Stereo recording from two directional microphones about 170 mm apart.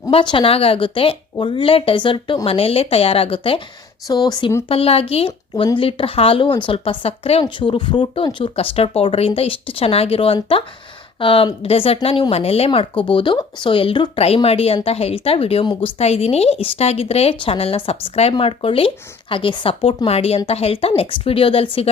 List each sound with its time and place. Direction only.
0.1 s a woman's voice: 30° left (ahead or behind)